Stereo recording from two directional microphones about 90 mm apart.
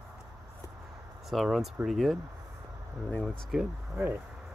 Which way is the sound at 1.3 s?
Centre (ahead or behind).